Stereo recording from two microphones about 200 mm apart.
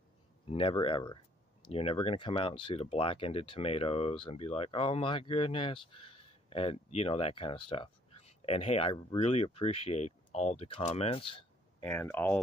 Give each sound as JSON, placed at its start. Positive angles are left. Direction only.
{"t": 0.5, "sound": "speech", "side_deg": 25}
{"t": 11.8, "sound": "speech", "side_deg": 10}